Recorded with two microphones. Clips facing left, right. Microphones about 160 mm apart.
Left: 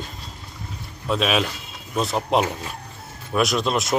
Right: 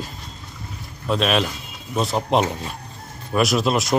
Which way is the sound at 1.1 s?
Centre (ahead or behind).